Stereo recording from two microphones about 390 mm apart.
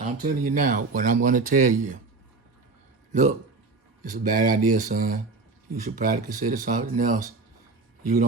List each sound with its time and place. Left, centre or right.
0.0 s speech: centre
3.1 s a man's voice: centre